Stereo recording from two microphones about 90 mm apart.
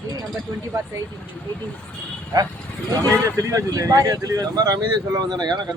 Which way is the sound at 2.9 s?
40° right (ahead or behind).